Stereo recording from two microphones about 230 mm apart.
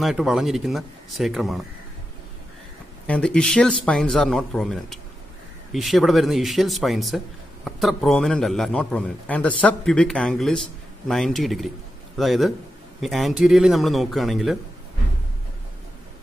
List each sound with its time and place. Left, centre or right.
0.0 s a man's voice: centre
3.1 s a man's voice: centre